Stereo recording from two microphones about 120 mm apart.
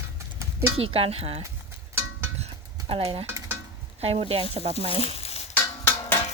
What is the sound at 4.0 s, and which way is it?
Speech, 55° right (ahead or behind).